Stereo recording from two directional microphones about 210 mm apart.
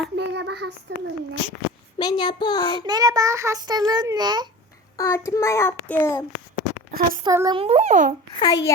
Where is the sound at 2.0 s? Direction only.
20° left (ahead or behind).